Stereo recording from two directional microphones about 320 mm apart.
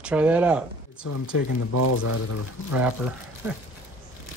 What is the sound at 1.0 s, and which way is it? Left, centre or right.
Speech, left.